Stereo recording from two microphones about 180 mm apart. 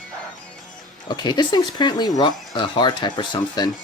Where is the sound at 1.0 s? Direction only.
25° left (ahead or behind).